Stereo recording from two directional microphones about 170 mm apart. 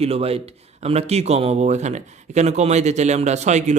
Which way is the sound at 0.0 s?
35° right (ahead or behind).